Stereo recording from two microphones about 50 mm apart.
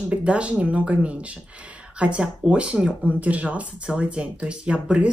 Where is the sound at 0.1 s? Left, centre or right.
Right.